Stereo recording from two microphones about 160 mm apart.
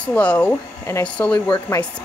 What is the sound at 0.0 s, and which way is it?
Speech, 10° left (ahead or behind).